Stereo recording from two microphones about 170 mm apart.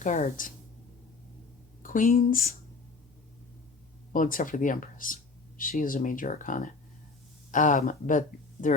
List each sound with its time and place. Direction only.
0.0 s speech: 45° left (ahead or behind)
1.8 s speech: 50° left (ahead or behind)
4.1 s speech: 55° left (ahead or behind)